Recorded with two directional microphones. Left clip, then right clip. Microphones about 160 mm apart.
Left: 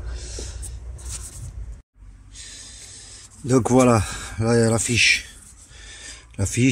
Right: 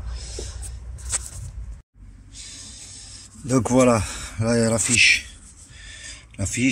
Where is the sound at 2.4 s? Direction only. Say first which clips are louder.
Even; 25° left (ahead or behind).